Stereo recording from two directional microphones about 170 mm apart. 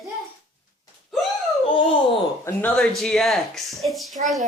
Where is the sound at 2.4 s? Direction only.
15° left (ahead or behind).